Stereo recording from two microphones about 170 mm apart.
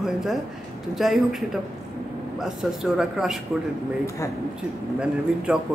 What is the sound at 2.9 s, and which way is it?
Speech, centre (ahead or behind).